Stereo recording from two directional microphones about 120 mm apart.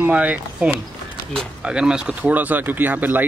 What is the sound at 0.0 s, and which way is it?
Speech, 10° right (ahead or behind).